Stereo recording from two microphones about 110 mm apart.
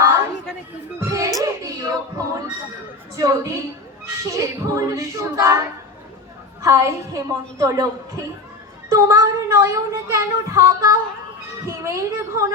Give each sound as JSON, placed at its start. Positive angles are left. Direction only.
{"t": 0.9, "sound": "music", "side_deg": -25}
{"t": 1.4, "sound": "a sound", "side_deg": -30}
{"t": 3.2, "sound": "speech", "side_deg": -25}